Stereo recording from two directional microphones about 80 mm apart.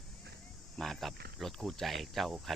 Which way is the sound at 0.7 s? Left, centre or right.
Centre.